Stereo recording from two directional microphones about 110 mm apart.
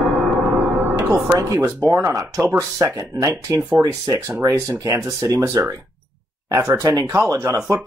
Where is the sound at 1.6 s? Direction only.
20° right (ahead or behind).